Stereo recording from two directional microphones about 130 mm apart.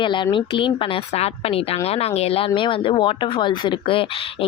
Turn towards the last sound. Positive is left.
turn(degrees=45)  # may be behind; listen again after turning